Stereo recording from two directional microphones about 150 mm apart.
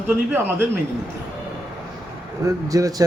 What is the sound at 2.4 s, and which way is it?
Speech, 25° right (ahead or behind).